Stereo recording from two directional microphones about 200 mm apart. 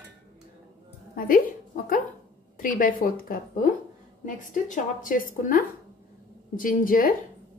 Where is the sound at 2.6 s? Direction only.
45° left (ahead or behind).